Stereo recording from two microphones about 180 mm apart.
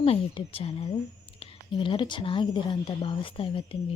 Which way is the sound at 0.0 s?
30° left (ahead or behind).